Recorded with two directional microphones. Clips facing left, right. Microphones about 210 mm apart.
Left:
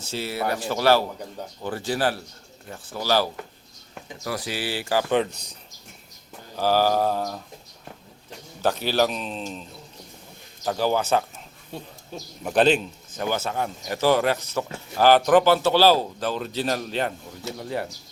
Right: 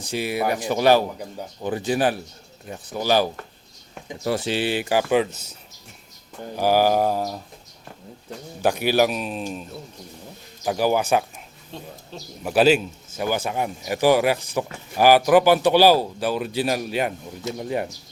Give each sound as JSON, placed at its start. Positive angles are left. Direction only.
{"t": 0.0, "sound": "a man's voice", "side_deg": -15}
{"t": 5.1, "sound": "speech", "side_deg": -5}
{"t": 6.6, "sound": "a man's voice", "side_deg": -15}
{"t": 8.6, "sound": "a man's voice", "side_deg": -15}
{"t": 10.7, "sound": "a man's voice", "side_deg": -15}
{"t": 11.7, "sound": "a man's voice", "side_deg": 0}